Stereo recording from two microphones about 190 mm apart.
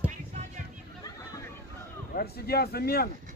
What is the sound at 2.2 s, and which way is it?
Speech, 55° left (ahead or behind).